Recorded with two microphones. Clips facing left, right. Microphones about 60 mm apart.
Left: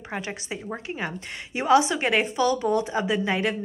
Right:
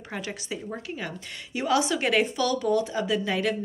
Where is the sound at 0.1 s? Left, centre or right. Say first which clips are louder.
Left 2 dB; left.